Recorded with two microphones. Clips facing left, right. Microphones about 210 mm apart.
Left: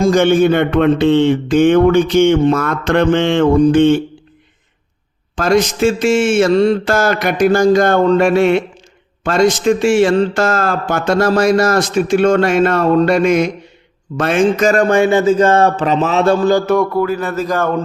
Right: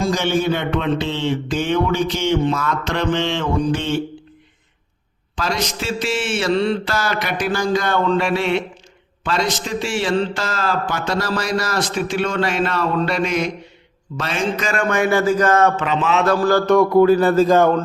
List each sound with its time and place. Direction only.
0.0 s a man's voice: 55° left (ahead or behind)
5.4 s a man's voice: 50° left (ahead or behind); by 16.6 s 20° left (ahead or behind)
16.6 s a sound: centre (ahead or behind)
17.0 s a man's voice: 30° right (ahead or behind)